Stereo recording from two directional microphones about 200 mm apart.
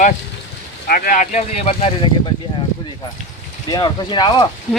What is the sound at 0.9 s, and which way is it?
Speech, 45° left (ahead or behind).